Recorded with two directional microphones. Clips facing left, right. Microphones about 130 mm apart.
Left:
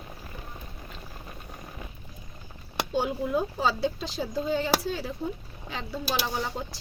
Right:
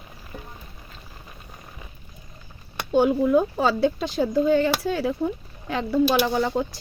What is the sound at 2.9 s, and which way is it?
Speech, 60° right (ahead or behind).